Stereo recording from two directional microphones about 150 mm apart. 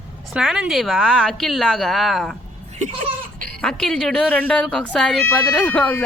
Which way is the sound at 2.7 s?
55° right (ahead or behind).